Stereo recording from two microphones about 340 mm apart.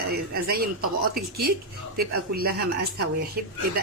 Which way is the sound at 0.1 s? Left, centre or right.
Right.